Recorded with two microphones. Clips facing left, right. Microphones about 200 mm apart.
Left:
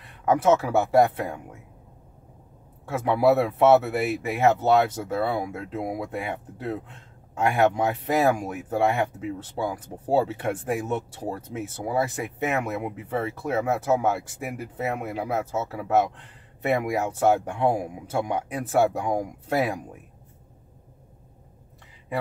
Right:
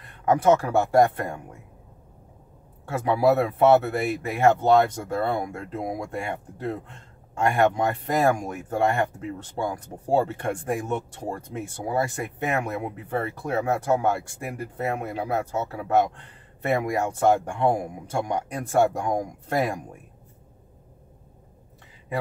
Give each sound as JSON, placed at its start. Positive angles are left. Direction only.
{"t": 0.0, "sound": "speech", "side_deg": 0}
{"t": 2.9, "sound": "speech", "side_deg": 0}